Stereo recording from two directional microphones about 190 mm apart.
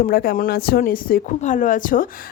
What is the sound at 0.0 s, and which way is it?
Speech, 50° left (ahead or behind).